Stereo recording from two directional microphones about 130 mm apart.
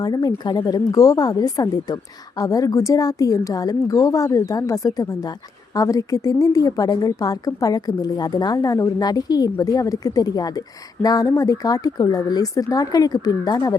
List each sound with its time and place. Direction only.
0.0 s speech: 30° left (ahead or behind)